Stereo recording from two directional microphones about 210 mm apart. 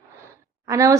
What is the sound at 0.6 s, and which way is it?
Speech, 15° right (ahead or behind).